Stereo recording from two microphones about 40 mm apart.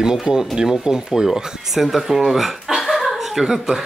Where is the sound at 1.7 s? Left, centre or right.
Centre.